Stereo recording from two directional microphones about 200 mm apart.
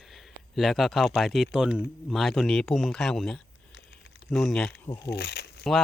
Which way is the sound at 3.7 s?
60° left (ahead or behind).